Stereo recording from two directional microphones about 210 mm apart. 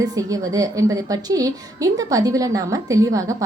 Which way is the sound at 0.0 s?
15° right (ahead or behind).